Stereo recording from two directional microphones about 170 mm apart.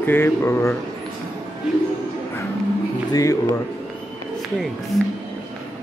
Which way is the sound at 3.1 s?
20° left (ahead or behind).